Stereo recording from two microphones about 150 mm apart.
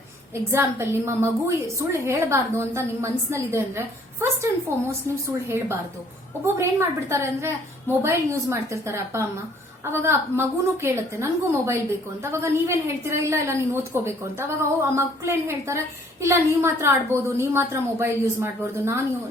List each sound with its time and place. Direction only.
0.5 s a woman's voice: 20° right (ahead or behind)